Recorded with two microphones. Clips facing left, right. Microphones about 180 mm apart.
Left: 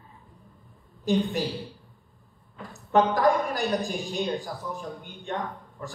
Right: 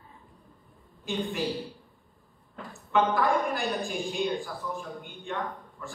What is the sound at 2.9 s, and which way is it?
A man's voice, 40° left (ahead or behind).